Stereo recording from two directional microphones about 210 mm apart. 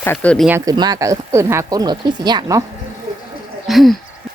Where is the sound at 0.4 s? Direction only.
15° right (ahead or behind).